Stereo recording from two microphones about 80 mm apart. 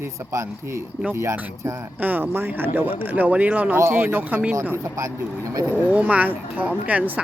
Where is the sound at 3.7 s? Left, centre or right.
Right.